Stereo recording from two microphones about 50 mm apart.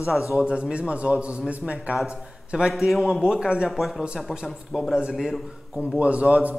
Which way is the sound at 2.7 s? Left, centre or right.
Centre.